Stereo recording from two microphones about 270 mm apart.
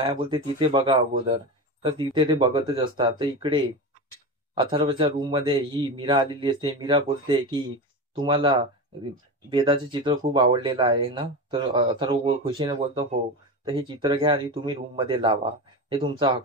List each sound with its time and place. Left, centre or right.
0.0 s a man's voice: centre